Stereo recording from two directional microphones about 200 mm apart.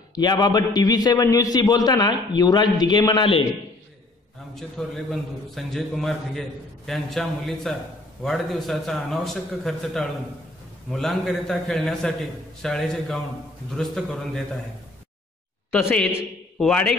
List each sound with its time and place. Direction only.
0.1 s a man's voice: 20° left (ahead or behind)
4.6 s a man's voice: centre (ahead or behind)
15.7 s a man's voice: 5° left (ahead or behind)